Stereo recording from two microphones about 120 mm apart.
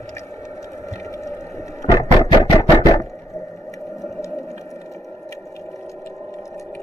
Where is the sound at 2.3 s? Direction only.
30° left (ahead or behind).